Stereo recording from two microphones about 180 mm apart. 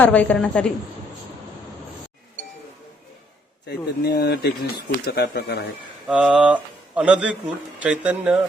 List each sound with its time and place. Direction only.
0.0 s a woman's voice: 5° left (ahead or behind)
4.0 s speech: 65° left (ahead or behind)
6.1 s speech: 5° right (ahead or behind)